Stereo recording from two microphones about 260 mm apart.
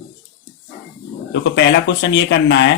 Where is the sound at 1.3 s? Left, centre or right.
Left.